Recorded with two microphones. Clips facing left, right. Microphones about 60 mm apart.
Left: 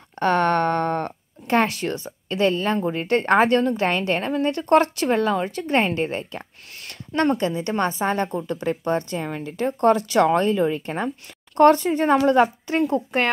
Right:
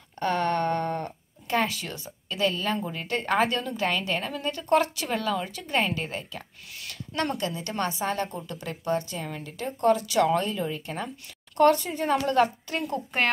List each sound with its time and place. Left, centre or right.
0.2 s speech: left
1.5 s a woman's voice: left
5.1 s a woman's voice: left
12.3 s a woman's voice: left
12.9 s speech: centre